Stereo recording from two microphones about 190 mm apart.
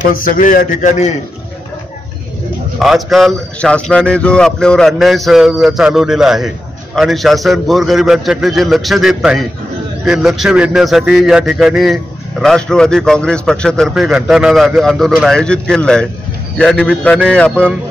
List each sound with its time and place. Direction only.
0.1 s a man's voice: 45° left (ahead or behind)
2.8 s a man's voice: centre (ahead or behind)